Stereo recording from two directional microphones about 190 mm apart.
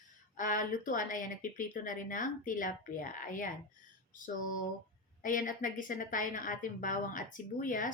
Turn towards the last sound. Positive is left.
turn(degrees=45)  # may be behind; listen again after turning